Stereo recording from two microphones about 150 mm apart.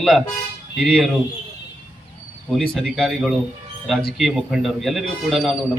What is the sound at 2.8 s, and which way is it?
A man's voice, centre (ahead or behind).